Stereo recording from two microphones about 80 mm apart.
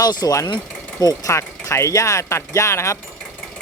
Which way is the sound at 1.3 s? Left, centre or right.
Left.